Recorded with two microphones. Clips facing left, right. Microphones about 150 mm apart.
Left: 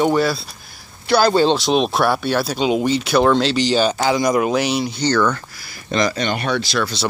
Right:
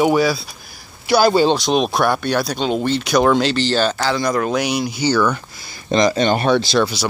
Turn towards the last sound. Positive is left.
turn(degrees=-30)  # may be behind; listen again after turning